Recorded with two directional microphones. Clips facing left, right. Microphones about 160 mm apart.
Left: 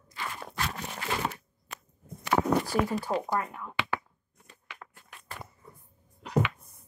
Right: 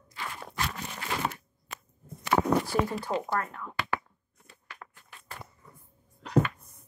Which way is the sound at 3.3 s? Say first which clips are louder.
Left 1 dB; 15° left (ahead or behind).